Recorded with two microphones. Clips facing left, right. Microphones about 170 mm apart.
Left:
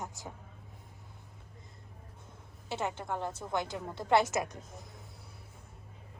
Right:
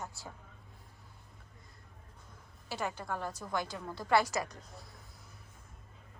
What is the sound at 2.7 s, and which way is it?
A woman's voice, 25° left (ahead or behind).